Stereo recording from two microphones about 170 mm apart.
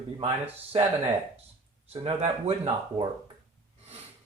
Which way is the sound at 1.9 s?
35° right (ahead or behind).